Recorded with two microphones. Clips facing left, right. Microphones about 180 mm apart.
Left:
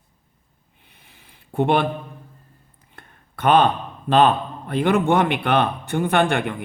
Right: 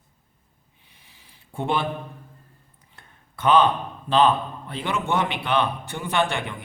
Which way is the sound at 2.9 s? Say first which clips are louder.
Left 4 dB; 60° left (ahead or behind).